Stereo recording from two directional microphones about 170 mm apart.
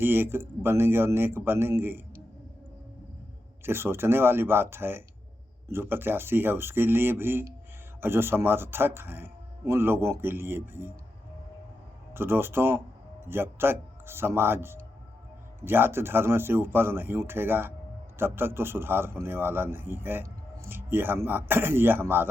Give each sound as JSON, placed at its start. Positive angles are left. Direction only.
{"t": 0.0, "sound": "a man's voice", "side_deg": -15}
{"t": 3.6, "sound": "a man's voice", "side_deg": -15}
{"t": 12.1, "sound": "a man's voice", "side_deg": -15}